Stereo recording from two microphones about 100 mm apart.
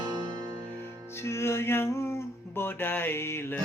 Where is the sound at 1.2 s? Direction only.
25° left (ahead or behind).